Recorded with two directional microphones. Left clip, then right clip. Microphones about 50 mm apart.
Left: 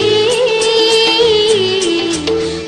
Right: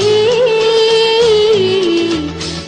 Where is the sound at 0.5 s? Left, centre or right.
Left.